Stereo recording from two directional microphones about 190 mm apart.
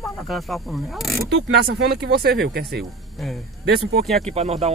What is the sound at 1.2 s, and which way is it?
Speech, 60° right (ahead or behind).